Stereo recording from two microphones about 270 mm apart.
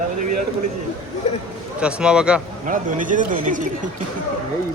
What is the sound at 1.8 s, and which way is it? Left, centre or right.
Speech, centre.